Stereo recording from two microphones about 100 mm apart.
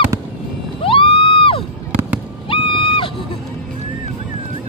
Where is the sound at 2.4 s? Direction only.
60° left (ahead or behind).